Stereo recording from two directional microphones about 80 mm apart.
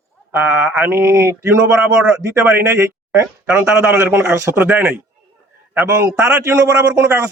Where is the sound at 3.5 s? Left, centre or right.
Centre.